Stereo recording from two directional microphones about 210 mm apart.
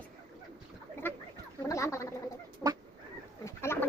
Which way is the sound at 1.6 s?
15° left (ahead or behind).